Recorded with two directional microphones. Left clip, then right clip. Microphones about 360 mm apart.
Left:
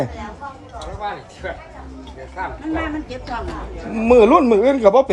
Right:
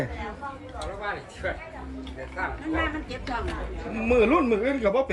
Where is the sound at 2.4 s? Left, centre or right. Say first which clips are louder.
Left 4 dB; left.